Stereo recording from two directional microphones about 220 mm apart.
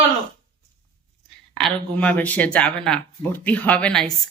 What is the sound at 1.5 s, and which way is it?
Speech, 5° left (ahead or behind).